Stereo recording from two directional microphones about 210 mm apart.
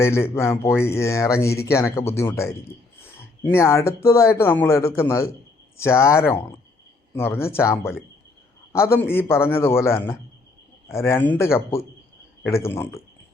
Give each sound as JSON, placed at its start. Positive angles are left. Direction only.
{"t": 0.0, "sound": "speech", "side_deg": 10}